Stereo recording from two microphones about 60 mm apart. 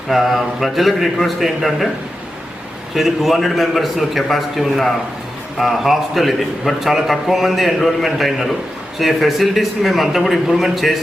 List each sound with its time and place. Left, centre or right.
0.1 s a man's voice: centre
2.9 s a man's voice: centre